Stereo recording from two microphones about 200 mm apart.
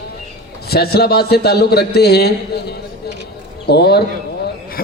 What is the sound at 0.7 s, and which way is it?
A man's voice, 50° left (ahead or behind).